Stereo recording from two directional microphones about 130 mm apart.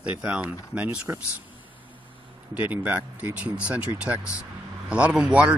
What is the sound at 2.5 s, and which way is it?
Speech, 10° right (ahead or behind).